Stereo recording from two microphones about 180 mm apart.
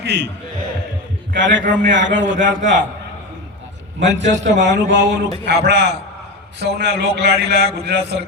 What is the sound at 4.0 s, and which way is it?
A man's voice, 80° right.